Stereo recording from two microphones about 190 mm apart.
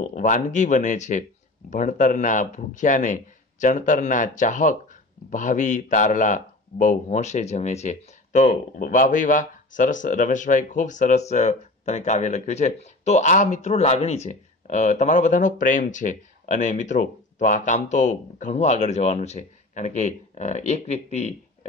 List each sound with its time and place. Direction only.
0.0 s speech: 40° left (ahead or behind)